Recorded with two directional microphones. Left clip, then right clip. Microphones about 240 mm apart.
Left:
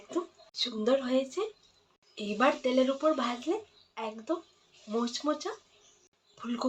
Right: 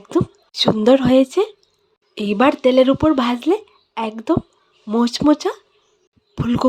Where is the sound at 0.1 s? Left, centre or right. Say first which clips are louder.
Right 15 dB; right.